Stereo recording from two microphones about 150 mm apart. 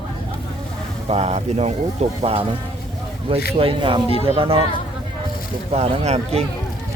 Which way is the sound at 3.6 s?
35° right (ahead or behind).